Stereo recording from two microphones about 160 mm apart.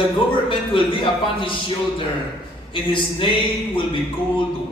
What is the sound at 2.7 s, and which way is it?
Speech, 30° left (ahead or behind).